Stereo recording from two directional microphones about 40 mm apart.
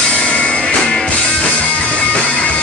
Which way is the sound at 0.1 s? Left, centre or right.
Left.